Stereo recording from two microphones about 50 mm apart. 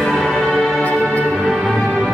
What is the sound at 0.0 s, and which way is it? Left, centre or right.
Music, centre.